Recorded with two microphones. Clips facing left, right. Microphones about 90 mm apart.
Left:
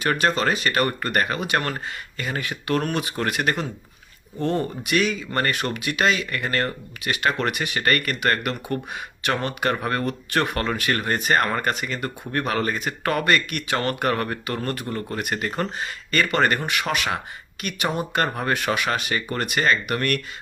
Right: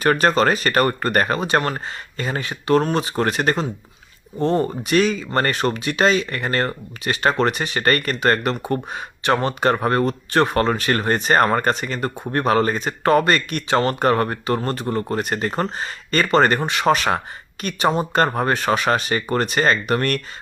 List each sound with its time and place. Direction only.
0.0 s speech: 40° right (ahead or behind)